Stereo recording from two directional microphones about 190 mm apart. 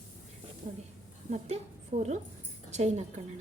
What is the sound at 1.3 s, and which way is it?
A woman's voice, 35° right (ahead or behind).